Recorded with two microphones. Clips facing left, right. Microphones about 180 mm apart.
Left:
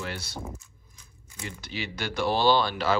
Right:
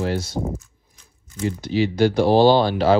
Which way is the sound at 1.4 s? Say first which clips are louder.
Right 15 dB; 45° right (ahead or behind).